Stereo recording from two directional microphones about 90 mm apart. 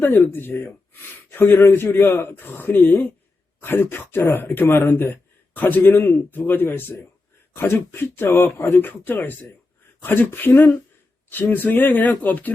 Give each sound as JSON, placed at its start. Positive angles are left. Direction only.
{"t": 0.0, "sound": "speech", "side_deg": 25}
{"t": 5.5, "sound": "speech", "side_deg": 20}